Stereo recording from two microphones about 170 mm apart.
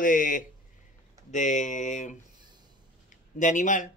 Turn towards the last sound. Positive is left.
turn(degrees=50)  # may be behind; listen again after turning